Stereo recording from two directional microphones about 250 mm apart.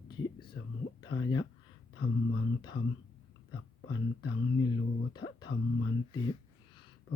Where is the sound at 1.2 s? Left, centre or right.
Centre.